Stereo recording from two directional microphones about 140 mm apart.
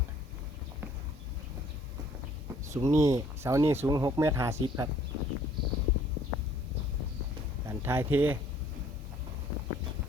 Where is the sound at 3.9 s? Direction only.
30° right (ahead or behind).